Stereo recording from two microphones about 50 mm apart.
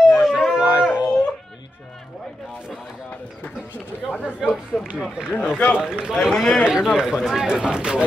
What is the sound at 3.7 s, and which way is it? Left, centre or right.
A man's voice, left.